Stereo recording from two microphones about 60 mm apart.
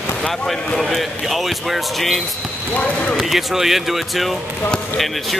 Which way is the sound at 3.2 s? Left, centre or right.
Centre.